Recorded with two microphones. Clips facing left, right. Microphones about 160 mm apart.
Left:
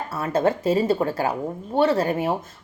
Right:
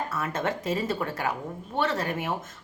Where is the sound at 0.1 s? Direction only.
30° left (ahead or behind).